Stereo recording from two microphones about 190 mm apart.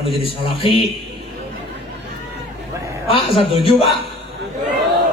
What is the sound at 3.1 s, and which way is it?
Speech, 30° left (ahead or behind).